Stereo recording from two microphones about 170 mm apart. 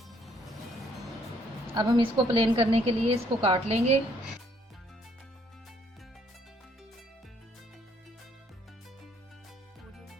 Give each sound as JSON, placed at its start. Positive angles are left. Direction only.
{"t": 1.7, "sound": "a woman's voice", "side_deg": -25}